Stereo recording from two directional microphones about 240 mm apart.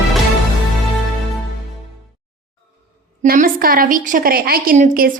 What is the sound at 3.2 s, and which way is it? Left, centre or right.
Speech, right.